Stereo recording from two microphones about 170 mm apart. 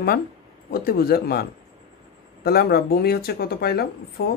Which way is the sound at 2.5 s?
65° left (ahead or behind).